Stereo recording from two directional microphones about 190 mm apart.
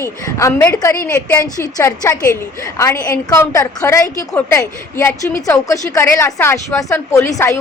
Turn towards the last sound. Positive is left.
turn(degrees=15)  # may be behind; listen again after turning